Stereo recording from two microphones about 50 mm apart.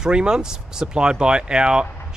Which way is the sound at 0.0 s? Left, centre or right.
Centre.